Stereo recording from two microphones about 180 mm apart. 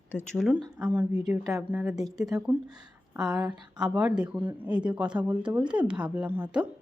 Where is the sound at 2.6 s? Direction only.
20° right (ahead or behind).